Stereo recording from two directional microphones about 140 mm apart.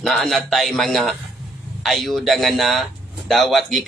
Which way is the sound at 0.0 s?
Centre (ahead or behind).